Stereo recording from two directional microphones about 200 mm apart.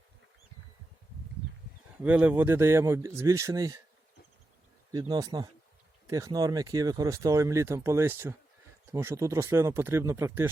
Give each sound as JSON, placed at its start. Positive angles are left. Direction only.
{"t": 2.0, "sound": "speech", "side_deg": -5}
{"t": 4.9, "sound": "speech", "side_deg": -20}